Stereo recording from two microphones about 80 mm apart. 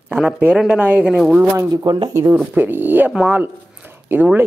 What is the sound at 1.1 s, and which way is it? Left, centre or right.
Speech, centre.